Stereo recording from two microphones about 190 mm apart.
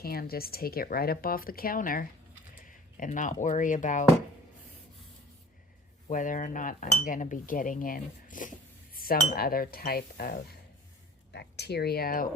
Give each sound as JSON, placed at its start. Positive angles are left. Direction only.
{"t": 0.0, "sound": "cutlery", "side_deg": 50}
{"t": 2.6, "sound": "typing", "side_deg": 45}
{"t": 3.4, "sound": "speech", "side_deg": 40}
{"t": 6.1, "sound": "cutlery", "side_deg": 45}
{"t": 11.3, "sound": "speech", "side_deg": 60}